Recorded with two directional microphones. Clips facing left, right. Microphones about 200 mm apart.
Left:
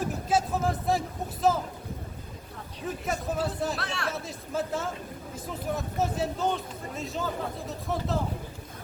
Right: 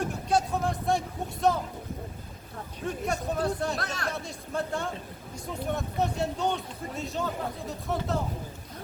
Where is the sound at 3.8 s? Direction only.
40° right (ahead or behind).